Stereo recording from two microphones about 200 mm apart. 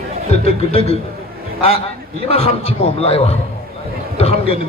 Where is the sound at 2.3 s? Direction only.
30° left (ahead or behind).